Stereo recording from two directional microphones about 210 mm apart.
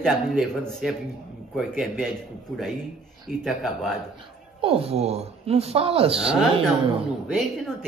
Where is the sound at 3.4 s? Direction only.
Centre (ahead or behind).